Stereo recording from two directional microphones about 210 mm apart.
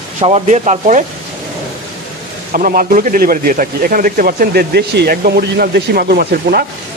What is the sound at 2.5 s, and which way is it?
A man's voice, 40° right (ahead or behind).